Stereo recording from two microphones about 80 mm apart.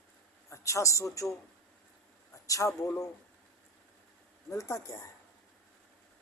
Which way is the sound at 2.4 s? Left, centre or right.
Left.